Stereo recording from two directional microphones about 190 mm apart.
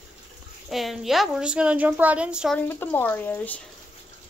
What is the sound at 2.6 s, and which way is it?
Speech, 10° left (ahead or behind).